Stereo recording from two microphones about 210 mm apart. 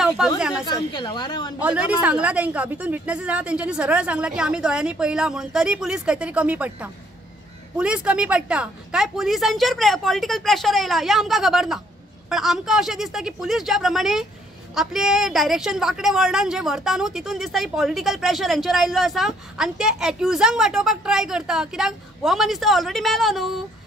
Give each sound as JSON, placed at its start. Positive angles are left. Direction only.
{"t": 0.4, "sound": "a sound", "side_deg": -5}
{"t": 0.7, "sound": "speech", "side_deg": 20}
{"t": 1.6, "sound": "a woman's voice", "side_deg": -5}